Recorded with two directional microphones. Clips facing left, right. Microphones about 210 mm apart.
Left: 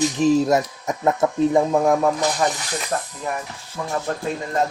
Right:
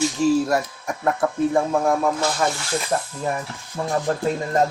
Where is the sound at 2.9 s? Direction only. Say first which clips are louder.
Right 1 dB; 20° right (ahead or behind).